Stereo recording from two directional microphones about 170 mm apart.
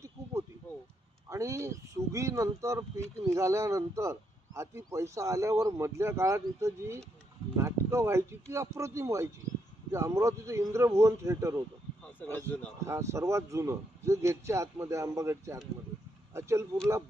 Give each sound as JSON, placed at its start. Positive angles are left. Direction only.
{"t": 1.3, "sound": "speech", "side_deg": -20}
{"t": 12.2, "sound": "a man's voice", "side_deg": 10}
{"t": 12.9, "sound": "speech", "side_deg": -15}